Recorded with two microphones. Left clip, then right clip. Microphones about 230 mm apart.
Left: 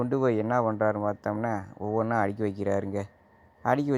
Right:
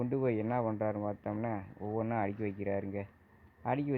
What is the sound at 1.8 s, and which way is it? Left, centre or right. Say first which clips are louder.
Speech: left 8 dB; left.